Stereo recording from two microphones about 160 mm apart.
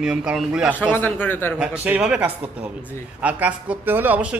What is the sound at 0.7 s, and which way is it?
Speech, 10° left (ahead or behind).